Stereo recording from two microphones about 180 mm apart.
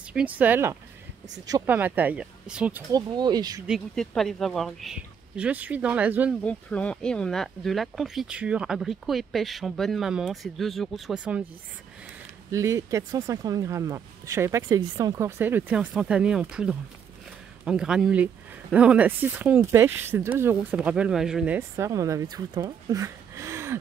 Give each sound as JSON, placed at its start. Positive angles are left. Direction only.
{"t": 0.1, "sound": "speech", "side_deg": -10}
{"t": 2.9, "sound": "speech", "side_deg": -25}
{"t": 3.6, "sound": "speech", "side_deg": 0}
{"t": 6.4, "sound": "speech", "side_deg": 5}
{"t": 12.4, "sound": "speech", "side_deg": -15}
{"t": 21.5, "sound": "speech", "side_deg": -15}